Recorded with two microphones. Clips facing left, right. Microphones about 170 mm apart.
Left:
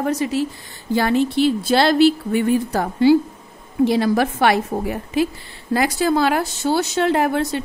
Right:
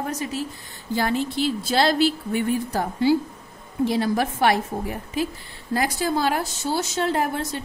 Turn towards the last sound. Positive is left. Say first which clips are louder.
# left 6 dB
turn(degrees=75)  # may be behind; listen again after turning